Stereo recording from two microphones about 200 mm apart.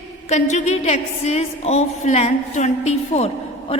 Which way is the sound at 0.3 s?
35° left (ahead or behind).